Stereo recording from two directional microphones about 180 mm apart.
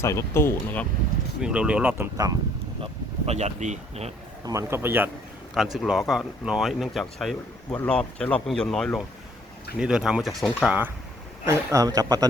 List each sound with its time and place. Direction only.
0.0 s speech: 15° left (ahead or behind)
1.4 s a man's voice: 5° right (ahead or behind)
2.8 s speech: 35° right (ahead or behind)
4.4 s a man's voice: 15° right (ahead or behind)
11.4 s speech: 20° right (ahead or behind)